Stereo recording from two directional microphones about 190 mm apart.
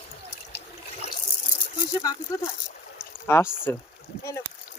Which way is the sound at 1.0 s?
35° left (ahead or behind).